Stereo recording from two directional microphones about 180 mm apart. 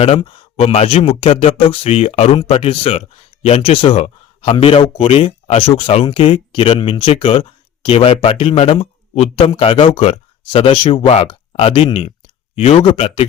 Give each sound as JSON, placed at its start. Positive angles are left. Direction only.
{"t": 0.0, "sound": "a man's voice", "side_deg": 30}